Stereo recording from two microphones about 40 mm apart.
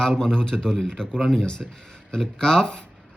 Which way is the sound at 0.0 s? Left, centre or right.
Centre.